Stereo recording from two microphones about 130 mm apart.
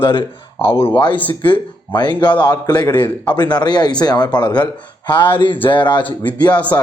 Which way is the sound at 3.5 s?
35° left (ahead or behind).